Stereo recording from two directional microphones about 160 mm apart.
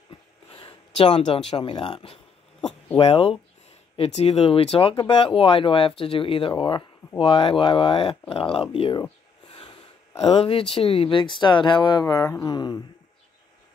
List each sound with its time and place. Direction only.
0.5 s speech: 35° left (ahead or behind)
9.5 s snort: 30° left (ahead or behind)
10.1 s speech: 35° left (ahead or behind)